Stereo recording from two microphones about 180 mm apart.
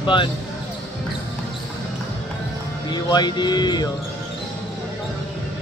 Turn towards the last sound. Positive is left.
turn(degrees=25)  # may be behind; listen again after turning